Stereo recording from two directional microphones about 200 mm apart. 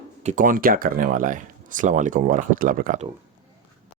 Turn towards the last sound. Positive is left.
turn(degrees=-40)  # may be behind; listen again after turning